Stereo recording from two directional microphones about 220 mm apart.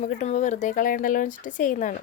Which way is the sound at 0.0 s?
35° left (ahead or behind).